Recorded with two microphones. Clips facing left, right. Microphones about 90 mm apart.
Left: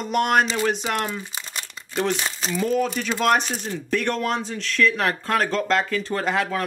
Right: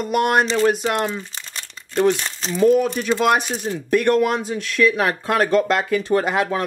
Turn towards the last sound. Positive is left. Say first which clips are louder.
# right 4 dB
turn(degrees=-15)  # may be behind; listen again after turning